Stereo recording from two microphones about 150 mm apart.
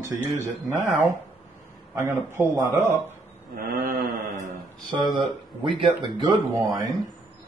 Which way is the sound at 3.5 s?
85° right.